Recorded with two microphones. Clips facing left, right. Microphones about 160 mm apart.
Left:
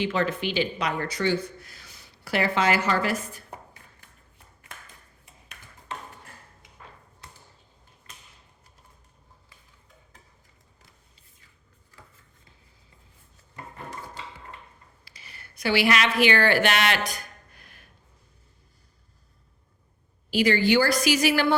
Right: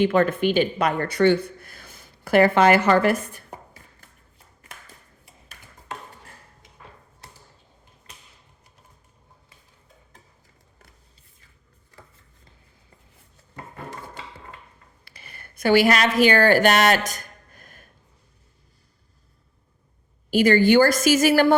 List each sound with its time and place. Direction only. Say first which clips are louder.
0.0 s speech: right 7 dB; 50° right (ahead or behind)
15.0 s a sound: right 5 dB; 55° right (ahead or behind)
20.3 s speech: right 5 dB; 50° right (ahead or behind)